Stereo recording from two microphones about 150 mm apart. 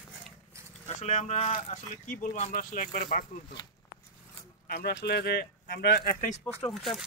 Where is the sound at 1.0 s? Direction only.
50° left (ahead or behind).